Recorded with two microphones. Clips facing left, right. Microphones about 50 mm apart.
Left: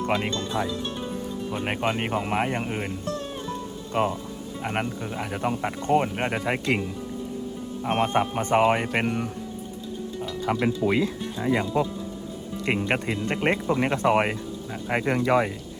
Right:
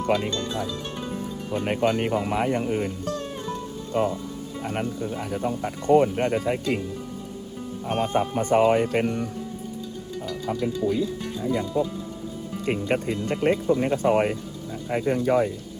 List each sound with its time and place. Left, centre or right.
0.3 s speech: left
2.3 s speech: left
3.9 s speech: left
4.6 s speech: left
6.4 s speech: left
7.9 s speech: left
10.4 s speech: left